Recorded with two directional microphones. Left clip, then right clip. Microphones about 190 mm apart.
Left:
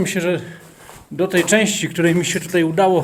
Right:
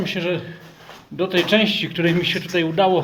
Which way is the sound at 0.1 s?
40° left (ahead or behind).